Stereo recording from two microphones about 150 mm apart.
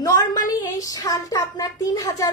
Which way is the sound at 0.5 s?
25° left (ahead or behind).